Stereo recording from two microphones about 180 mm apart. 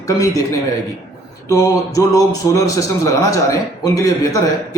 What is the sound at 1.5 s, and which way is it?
A man's voice, 20° left (ahead or behind).